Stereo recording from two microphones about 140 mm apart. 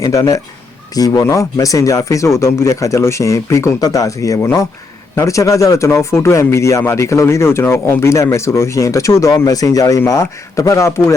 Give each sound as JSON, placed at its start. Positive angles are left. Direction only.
{"t": 0.0, "sound": "speech", "side_deg": 25}